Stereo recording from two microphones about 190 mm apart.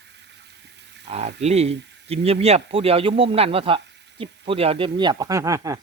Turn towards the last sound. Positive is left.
turn(degrees=-15)  # may be behind; listen again after turning